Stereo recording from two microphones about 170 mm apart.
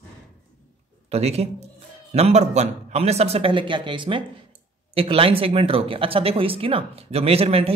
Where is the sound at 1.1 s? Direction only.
40° right (ahead or behind).